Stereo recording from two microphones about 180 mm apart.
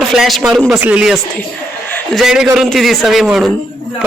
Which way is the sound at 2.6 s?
Centre (ahead or behind).